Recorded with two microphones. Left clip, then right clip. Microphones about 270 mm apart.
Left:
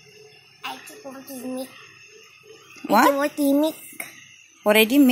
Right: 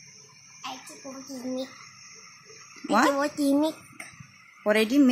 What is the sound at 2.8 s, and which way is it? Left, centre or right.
Speech, centre.